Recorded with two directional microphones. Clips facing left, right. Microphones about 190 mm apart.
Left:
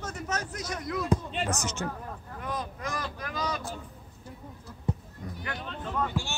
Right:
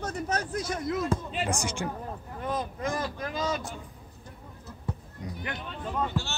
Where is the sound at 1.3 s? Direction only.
10° right (ahead or behind).